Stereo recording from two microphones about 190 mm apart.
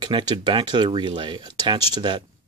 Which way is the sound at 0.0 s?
25° right (ahead or behind).